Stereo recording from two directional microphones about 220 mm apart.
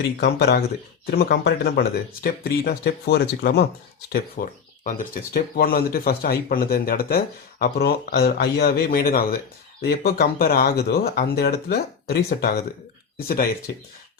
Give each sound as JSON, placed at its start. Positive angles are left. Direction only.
{"t": 0.2, "sound": "speech", "side_deg": 45}